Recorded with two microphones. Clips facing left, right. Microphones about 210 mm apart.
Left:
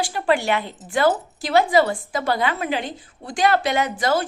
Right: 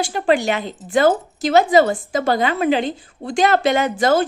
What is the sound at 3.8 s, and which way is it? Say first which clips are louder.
Speech: right 4 dB; 50° right (ahead or behind).